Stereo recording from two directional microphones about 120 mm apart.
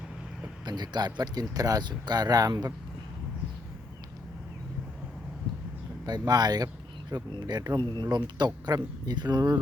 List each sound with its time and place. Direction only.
0.6 s speech: 35° right (ahead or behind)
6.1 s speech: 35° right (ahead or behind)